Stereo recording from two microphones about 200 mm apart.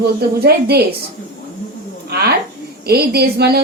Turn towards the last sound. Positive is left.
turn(degrees=-50)  # may be behind; listen again after turning